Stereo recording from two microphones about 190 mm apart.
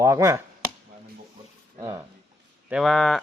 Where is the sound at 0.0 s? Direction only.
15° right (ahead or behind).